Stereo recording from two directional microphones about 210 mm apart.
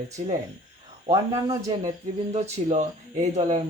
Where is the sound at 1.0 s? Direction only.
20° right (ahead or behind).